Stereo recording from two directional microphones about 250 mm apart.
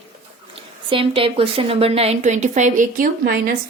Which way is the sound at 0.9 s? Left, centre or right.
Right.